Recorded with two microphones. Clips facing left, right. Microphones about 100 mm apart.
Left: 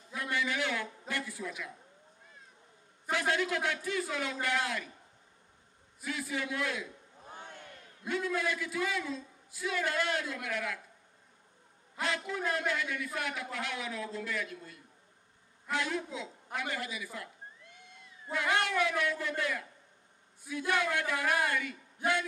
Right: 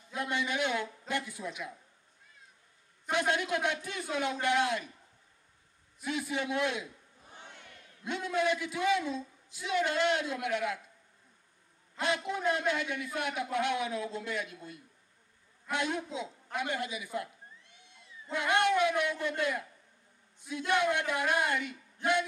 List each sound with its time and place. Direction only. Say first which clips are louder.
0.1 s a man's voice: right 1 dB; 20° right (ahead or behind)
3.1 s a man's voice: right 1 dB; 20° right (ahead or behind)
5.9 s a man's voice: right 2 dB; 20° right (ahead or behind)
7.3 s a sound: left 3 dB; 45° left (ahead or behind)
8.1 s a man's voice: right 2 dB; 20° right (ahead or behind)
12.0 s a man's voice: right 3 dB; 20° right (ahead or behind)
17.6 s cat: left 4 dB; 50° left (ahead or behind)
18.3 s a man's voice: right 3 dB; 20° right (ahead or behind)